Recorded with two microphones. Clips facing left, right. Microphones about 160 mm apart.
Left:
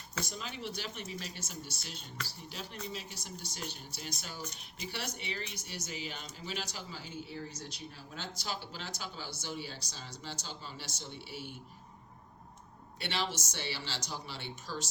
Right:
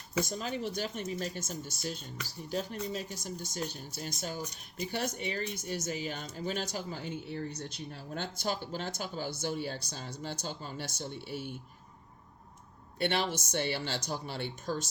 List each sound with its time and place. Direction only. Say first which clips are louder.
0.3 s speech: right 6 dB; 45° right (ahead or behind)
13.0 s speech: right 6 dB; 55° right (ahead or behind)